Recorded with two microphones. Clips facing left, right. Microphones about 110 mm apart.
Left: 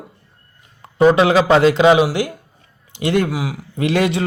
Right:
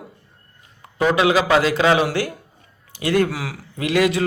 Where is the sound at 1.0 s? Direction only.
30° left (ahead or behind); by 3.6 s 15° left (ahead or behind).